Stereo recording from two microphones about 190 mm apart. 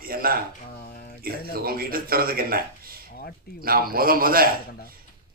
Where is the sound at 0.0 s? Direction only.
50° right (ahead or behind).